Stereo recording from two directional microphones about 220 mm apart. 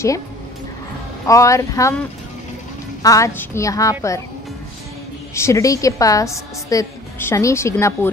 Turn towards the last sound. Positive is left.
turn(degrees=15)  # may be behind; listen again after turning